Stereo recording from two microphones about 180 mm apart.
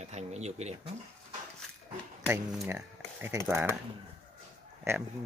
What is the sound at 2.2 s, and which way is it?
Speech, 15° right (ahead or behind).